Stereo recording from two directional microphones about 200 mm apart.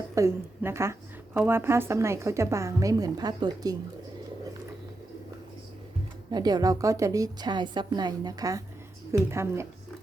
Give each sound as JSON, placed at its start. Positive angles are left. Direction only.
{"t": 0.1, "sound": "a woman's voice", "side_deg": -15}
{"t": 6.3, "sound": "a woman's voice", "side_deg": -20}